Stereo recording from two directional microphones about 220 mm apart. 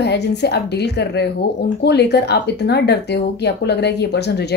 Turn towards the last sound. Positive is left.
turn(degrees=50)  # may be behind; listen again after turning